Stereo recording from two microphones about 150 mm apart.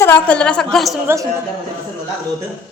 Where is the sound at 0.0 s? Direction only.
10° left (ahead or behind).